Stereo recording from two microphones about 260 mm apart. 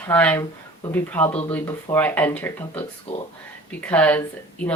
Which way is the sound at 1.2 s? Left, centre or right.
Left.